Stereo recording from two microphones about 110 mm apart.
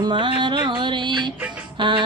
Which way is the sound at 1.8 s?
50° right (ahead or behind).